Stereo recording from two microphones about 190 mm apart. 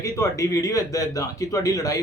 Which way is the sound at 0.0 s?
15° left (ahead or behind).